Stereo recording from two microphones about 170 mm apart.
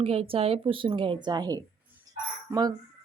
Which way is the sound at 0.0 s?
35° right (ahead or behind).